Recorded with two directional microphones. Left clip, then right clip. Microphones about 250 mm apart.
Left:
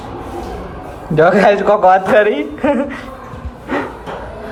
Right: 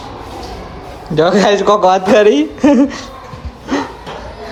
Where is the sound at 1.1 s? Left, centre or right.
Centre.